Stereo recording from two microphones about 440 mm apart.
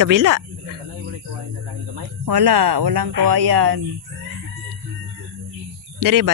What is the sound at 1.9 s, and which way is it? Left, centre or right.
Speech, right.